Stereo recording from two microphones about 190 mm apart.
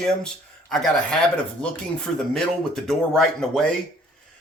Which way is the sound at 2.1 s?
5° left (ahead or behind).